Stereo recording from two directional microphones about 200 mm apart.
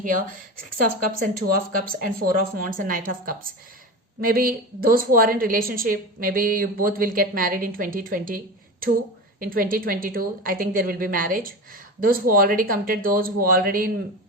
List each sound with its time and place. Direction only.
0.0 s a woman's voice: 45° right (ahead or behind)